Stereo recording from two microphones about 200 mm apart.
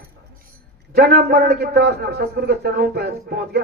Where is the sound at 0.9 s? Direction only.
55° right (ahead or behind).